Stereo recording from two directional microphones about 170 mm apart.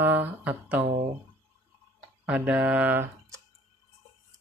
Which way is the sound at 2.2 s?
5° right (ahead or behind).